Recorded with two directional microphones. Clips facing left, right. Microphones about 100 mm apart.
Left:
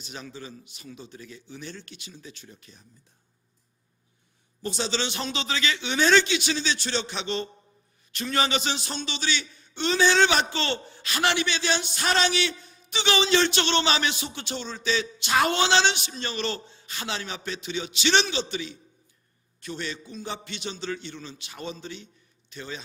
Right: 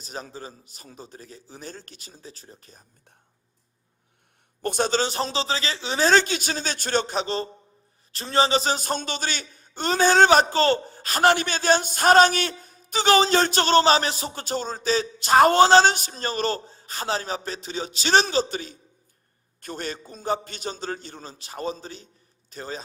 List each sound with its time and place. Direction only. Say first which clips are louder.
0.0 s a man's voice: right 3 dB; 40° right (ahead or behind)
4.6 s a man's voice: right 6 dB; 50° right (ahead or behind)